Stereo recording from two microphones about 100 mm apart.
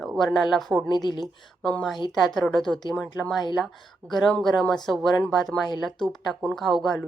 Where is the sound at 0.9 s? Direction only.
45° left (ahead or behind).